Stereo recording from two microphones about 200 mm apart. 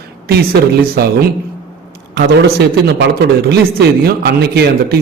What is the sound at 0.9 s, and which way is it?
A man's voice, 50° right (ahead or behind).